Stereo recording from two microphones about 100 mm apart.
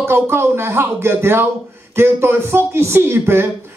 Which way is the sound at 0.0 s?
25° right (ahead or behind).